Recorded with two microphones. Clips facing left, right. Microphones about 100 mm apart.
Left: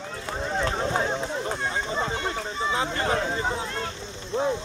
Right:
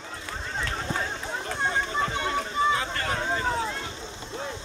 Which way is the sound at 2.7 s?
20° left (ahead or behind).